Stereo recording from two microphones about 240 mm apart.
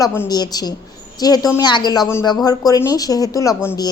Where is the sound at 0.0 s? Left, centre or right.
Centre.